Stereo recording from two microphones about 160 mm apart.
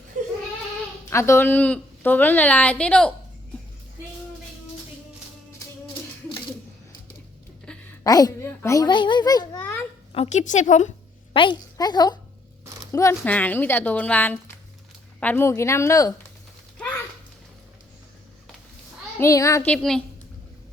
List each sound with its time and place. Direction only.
0.1 s a sound: 50° right (ahead or behind)
1.1 s a woman's voice: 15° left (ahead or behind)
7.7 s a sound: 5° left (ahead or behind)
8.0 s a child's voice: 25° left (ahead or behind)
10.1 s a woman's voice: 40° left (ahead or behind)
11.3 s a woman's voice: 30° left (ahead or behind)
19.2 s a child's voice: 20° left (ahead or behind)
19.6 s a child's voice: 5° left (ahead or behind)